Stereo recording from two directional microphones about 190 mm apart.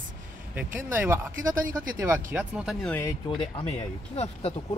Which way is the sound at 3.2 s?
25° left (ahead or behind).